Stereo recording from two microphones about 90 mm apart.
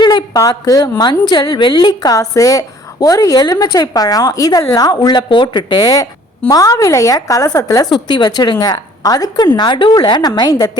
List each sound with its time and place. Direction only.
0.0 s a woman's voice: 55° left (ahead or behind); by 1.0 s 40° left (ahead or behind)
1.0 s a woman's voice: 60° left (ahead or behind); by 7.9 s 45° left (ahead or behind)
7.9 s a woman's voice: 55° left (ahead or behind)
9.6 s a woman's voice: 60° left (ahead or behind)